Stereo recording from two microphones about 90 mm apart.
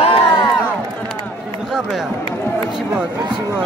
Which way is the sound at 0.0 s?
90° left.